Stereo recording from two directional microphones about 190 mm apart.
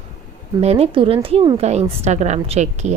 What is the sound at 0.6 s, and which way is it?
A woman's voice, 35° right (ahead or behind).